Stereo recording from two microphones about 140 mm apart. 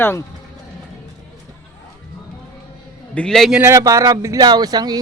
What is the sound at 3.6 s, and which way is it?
Speech, 20° right (ahead or behind).